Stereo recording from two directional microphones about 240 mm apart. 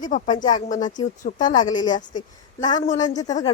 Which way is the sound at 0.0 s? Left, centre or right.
Left.